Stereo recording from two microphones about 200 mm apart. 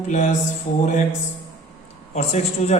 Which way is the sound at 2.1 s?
35° left (ahead or behind).